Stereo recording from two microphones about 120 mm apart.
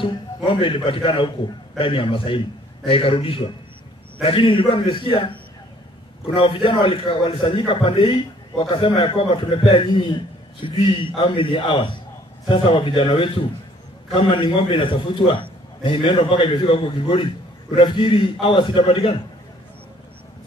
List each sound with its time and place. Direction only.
0.0 s a man's voice: 45° left (ahead or behind)